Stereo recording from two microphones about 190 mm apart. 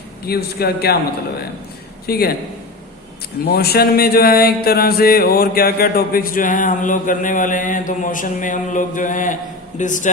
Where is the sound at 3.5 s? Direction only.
55° left (ahead or behind).